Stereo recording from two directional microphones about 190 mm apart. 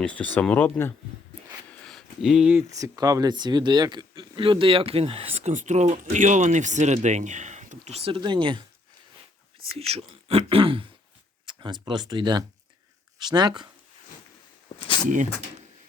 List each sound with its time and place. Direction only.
0.0 s speech: 5° left (ahead or behind); by 8.6 s 25° right (ahead or behind)
9.7 s speech: 30° right (ahead or behind)
14.8 s a sound: 25° left (ahead or behind)